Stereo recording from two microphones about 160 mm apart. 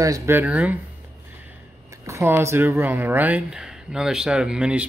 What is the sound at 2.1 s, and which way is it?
Speech, 15° right (ahead or behind).